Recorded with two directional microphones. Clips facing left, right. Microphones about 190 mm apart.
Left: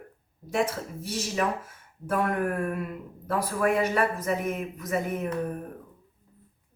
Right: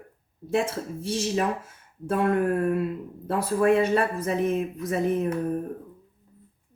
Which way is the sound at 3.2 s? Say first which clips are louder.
Right 4 dB; 25° right (ahead or behind).